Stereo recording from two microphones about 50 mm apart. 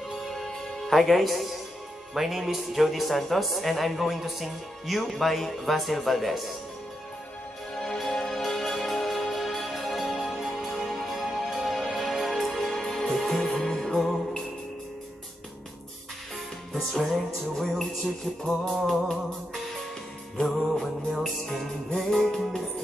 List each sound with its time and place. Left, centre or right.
0.2 s music: centre
2.1 s a woman's voice: centre
7.7 s music: centre
16.7 s music: centre
18.8 s a woman's voice: centre
20.3 s music: centre